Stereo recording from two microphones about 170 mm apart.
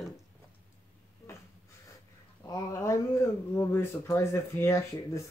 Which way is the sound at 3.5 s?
15° left (ahead or behind).